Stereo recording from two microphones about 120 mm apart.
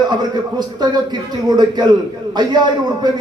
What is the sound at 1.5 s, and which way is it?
Speech, 35° right (ahead or behind).